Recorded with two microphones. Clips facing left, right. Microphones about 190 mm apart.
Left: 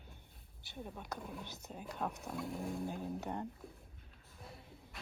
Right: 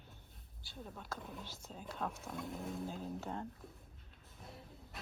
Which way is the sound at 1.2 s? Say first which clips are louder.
Left 2 dB; 5° left (ahead or behind).